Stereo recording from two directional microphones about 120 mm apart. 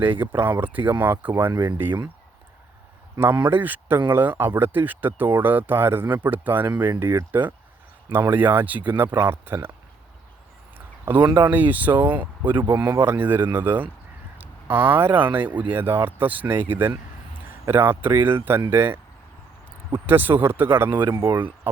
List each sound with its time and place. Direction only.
0.0 s speech: 15° right (ahead or behind)
3.2 s speech: 20° right (ahead or behind)
10.8 s a sound: 20° right (ahead or behind)
11.2 s speech: 40° right (ahead or behind)
11.5 s speech: 15° right (ahead or behind)
14.3 s a sound: 15° right (ahead or behind)
15.3 s speech: 15° right (ahead or behind)